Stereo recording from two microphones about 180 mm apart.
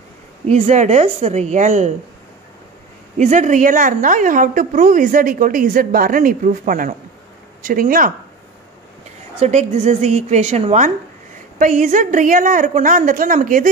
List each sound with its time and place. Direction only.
0.5 s a woman's voice: 40° right (ahead or behind)
3.2 s a woman's voice: 40° right (ahead or behind)
9.4 s a woman's voice: 40° right (ahead or behind)